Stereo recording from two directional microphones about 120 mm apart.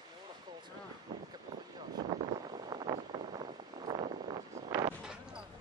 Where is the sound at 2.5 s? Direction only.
40° right (ahead or behind).